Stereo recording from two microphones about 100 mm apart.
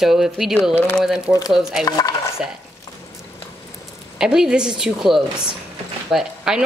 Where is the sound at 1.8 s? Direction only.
40° left (ahead or behind).